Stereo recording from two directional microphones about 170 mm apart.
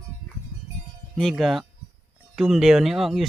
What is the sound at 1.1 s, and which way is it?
Speech, centre (ahead or behind).